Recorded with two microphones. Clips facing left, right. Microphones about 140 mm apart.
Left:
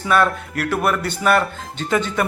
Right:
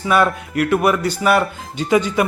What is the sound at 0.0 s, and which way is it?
A man's voice, 5° right (ahead or behind).